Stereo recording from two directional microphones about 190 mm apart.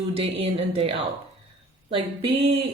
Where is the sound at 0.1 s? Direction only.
30° right (ahead or behind).